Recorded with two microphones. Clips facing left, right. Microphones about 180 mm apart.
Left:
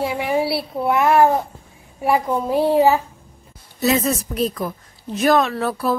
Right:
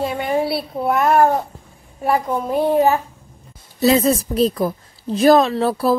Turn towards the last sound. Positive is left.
turn(degrees=-35)  # may be behind; listen again after turning